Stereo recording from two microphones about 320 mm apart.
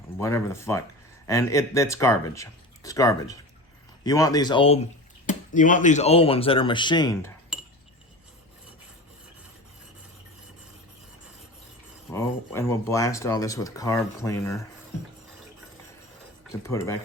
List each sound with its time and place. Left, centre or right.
0.2 s speech: centre
7.5 s cutlery: centre
12.1 s speech: centre
16.6 s speech: centre